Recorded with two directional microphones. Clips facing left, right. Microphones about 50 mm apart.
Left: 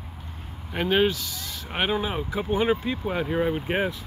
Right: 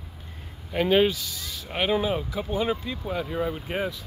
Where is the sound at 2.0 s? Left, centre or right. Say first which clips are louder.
Right 2 dB; centre.